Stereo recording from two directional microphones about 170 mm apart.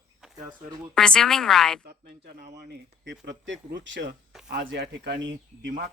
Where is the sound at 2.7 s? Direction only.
90° right.